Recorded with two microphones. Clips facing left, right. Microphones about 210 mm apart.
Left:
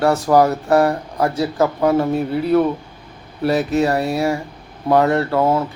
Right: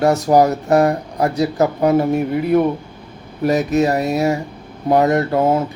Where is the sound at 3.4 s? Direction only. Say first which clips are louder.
Right 1 dB; 15° right (ahead or behind).